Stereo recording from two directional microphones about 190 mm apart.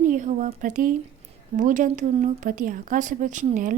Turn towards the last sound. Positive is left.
turn(degrees=-45)  # may be behind; listen again after turning